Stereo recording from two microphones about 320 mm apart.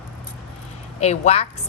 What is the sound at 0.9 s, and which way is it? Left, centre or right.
Speech, left.